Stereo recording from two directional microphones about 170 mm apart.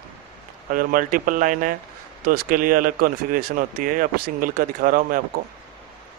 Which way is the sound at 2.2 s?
60° right (ahead or behind).